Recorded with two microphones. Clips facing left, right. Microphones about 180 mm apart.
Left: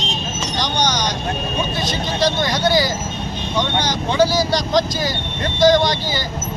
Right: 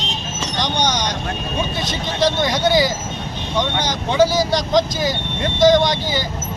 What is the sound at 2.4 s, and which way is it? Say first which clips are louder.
Speech: right 1 dB; 20° right (ahead or behind).